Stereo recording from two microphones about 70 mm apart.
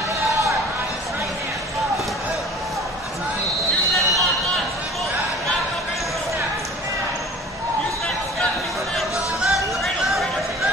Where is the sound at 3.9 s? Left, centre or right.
Centre.